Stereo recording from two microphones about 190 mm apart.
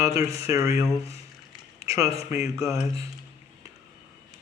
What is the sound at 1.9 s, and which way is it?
A man's voice, 15° right (ahead or behind).